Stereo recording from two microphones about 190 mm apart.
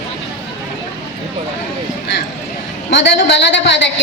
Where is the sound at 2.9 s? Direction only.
70° left (ahead or behind).